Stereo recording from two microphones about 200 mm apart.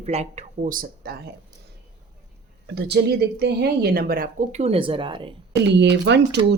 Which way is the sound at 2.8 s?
55° right (ahead or behind).